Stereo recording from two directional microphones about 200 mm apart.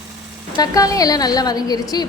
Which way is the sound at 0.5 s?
20° left (ahead or behind).